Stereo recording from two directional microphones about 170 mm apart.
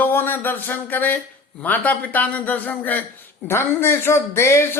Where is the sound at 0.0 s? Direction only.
10° left (ahead or behind).